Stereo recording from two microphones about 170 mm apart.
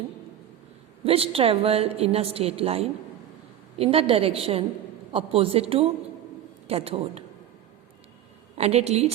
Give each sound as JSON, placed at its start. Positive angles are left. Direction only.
{"t": 1.0, "sound": "a woman's voice", "side_deg": -35}
{"t": 8.5, "sound": "a woman's voice", "side_deg": -40}